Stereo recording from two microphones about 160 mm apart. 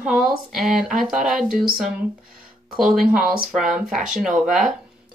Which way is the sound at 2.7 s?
5° right (ahead or behind).